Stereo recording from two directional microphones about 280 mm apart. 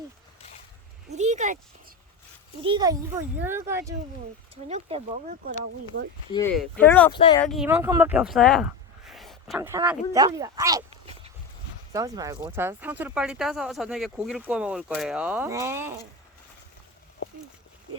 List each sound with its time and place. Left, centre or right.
1.1 s a sound: right
2.6 s speech: centre
4.7 s speech: right
6.6 s speech: centre
7.1 s speech: centre
7.4 s speech: centre